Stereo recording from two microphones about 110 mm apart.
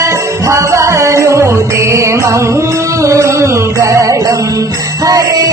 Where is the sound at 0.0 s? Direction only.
30° right (ahead or behind).